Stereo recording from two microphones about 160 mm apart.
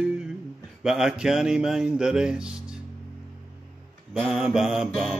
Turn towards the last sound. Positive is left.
turn(degrees=0)  # may be behind; listen again after turning